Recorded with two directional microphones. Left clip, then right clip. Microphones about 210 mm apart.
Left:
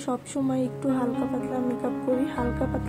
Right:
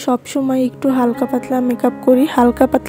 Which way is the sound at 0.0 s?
35° right (ahead or behind).